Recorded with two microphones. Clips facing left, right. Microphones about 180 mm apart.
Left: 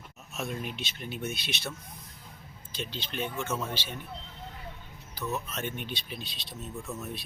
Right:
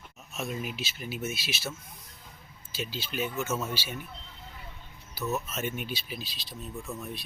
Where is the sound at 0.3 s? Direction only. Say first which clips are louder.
Right 1 dB; centre (ahead or behind).